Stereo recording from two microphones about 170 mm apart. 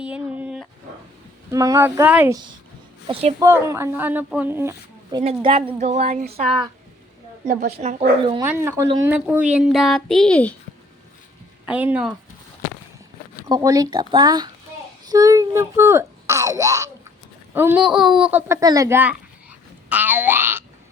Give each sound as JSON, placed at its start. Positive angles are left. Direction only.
{"t": 0.0, "sound": "dog", "side_deg": -5}
{"t": 1.5, "sound": "speech", "side_deg": -20}
{"t": 3.1, "sound": "speech", "side_deg": -35}
{"t": 3.4, "sound": "speech", "side_deg": -15}
{"t": 5.4, "sound": "speech", "side_deg": -35}
{"t": 7.4, "sound": "a woman's voice", "side_deg": -60}
{"t": 7.8, "sound": "speech", "side_deg": -40}
{"t": 8.4, "sound": "speech", "side_deg": -15}
{"t": 11.6, "sound": "speech", "side_deg": -10}
{"t": 13.5, "sound": "speech", "side_deg": -20}
{"t": 19.9, "sound": "a sound", "side_deg": -10}